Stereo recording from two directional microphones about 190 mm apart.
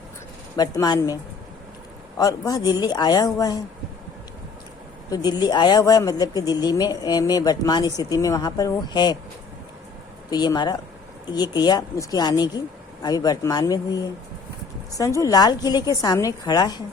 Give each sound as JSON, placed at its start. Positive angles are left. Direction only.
{"t": 0.5, "sound": "speech", "side_deg": 20}
{"t": 5.1, "sound": "speech", "side_deg": 20}
{"t": 10.2, "sound": "speech", "side_deg": 20}